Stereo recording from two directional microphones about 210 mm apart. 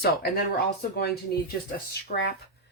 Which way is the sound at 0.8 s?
50° left (ahead or behind).